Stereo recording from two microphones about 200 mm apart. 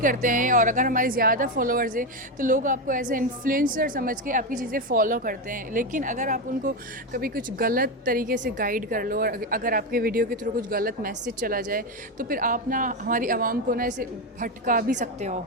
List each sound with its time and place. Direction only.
0.0 s speech: 40° right (ahead or behind)